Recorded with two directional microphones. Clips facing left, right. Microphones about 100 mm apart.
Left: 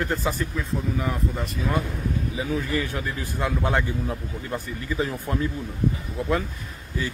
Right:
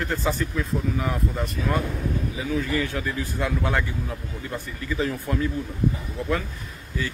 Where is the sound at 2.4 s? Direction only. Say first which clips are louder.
Right 1 dB; 25° left (ahead or behind).